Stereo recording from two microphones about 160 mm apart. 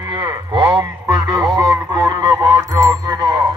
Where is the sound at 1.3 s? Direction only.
25° right (ahead or behind).